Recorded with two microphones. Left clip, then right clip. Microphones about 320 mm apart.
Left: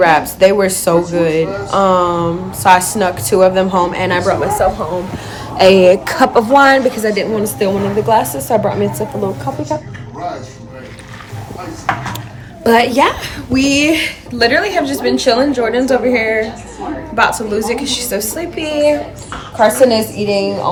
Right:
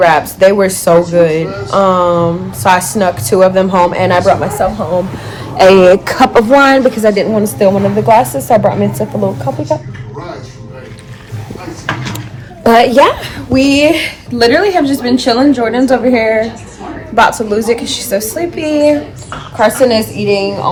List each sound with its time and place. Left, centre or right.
0.0 s speech: centre
5.7 s a woman's voice: centre
12.6 s speech: centre
19.5 s a woman's voice: right